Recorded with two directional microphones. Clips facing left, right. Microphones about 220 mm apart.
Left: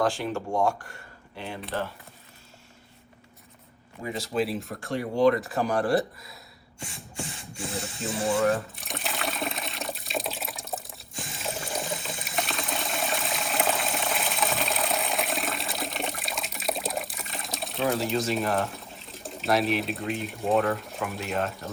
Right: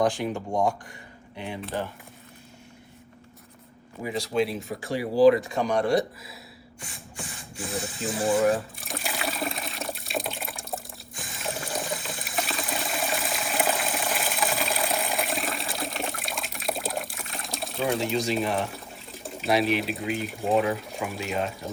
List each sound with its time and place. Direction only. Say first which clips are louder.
0.0 s speech: right 2 dB; 15° right (ahead or behind)
4.1 s speech: right 2 dB; centre (ahead or behind)
7.5 s speech: right 2 dB; centre (ahead or behind)
8.7 s water: right 1 dB; centre (ahead or behind)
11.2 s trickle: even; centre (ahead or behind)